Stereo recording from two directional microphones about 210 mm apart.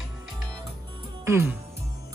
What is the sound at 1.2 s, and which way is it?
Music, 10° right (ahead or behind).